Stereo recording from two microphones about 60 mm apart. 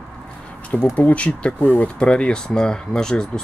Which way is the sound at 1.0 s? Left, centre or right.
Left.